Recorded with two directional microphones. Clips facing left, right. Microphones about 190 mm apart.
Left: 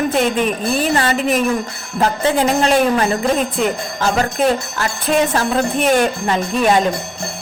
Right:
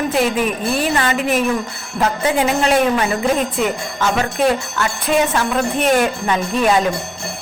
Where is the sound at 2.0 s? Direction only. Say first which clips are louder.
Left 1 dB; 35° left (ahead or behind).